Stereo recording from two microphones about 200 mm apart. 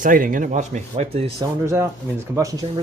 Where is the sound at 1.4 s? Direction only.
15° right (ahead or behind).